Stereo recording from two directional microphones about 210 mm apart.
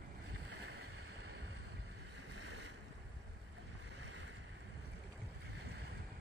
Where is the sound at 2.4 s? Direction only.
55° right (ahead or behind).